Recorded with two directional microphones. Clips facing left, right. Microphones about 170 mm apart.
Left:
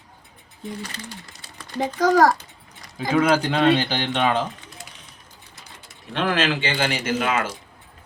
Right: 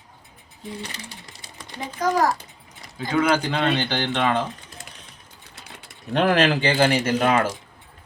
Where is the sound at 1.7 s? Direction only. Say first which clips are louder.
Left 5 dB; 90° left.